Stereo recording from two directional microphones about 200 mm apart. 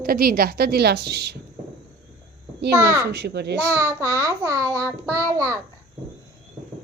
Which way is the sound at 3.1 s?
55° right (ahead or behind).